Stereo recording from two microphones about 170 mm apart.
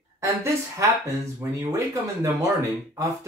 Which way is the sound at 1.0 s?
15° right (ahead or behind).